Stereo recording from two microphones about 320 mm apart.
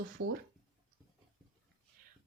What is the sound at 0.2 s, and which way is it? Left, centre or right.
Speech, right.